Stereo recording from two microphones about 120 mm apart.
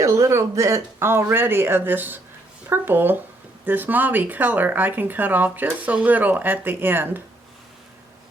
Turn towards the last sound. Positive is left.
turn(degrees=-15)  # may be behind; listen again after turning